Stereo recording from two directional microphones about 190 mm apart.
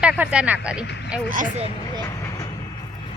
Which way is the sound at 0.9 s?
65° left (ahead or behind).